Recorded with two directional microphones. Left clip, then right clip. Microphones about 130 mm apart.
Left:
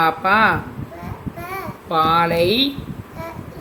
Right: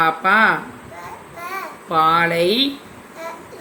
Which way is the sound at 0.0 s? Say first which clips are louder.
Right 1 dB; centre (ahead or behind).